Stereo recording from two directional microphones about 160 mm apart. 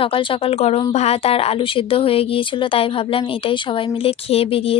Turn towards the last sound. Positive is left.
turn(degrees=35)  # may be behind; listen again after turning